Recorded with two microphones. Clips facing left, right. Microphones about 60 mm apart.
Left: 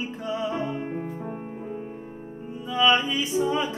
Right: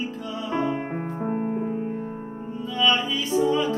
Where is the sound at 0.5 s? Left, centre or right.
Right.